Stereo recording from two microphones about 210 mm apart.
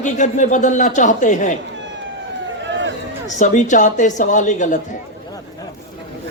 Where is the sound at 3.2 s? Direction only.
35° left (ahead or behind).